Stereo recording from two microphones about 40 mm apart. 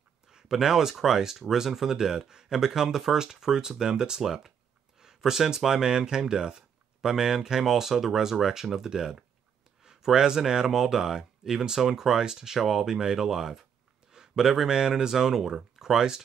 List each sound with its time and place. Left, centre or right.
0.3 s speech: centre
14.1 s a sound: centre
14.4 s speech: centre
14.7 s speech: centre